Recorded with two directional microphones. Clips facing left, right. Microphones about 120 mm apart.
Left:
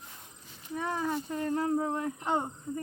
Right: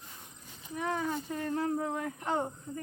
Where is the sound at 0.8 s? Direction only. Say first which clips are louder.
Left 1 dB; 30° left (ahead or behind).